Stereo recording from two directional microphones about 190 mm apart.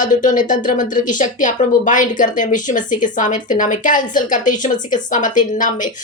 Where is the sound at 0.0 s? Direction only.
40° left (ahead or behind).